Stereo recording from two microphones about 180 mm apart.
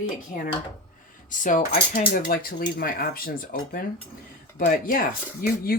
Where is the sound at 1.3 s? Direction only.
45° left (ahead or behind).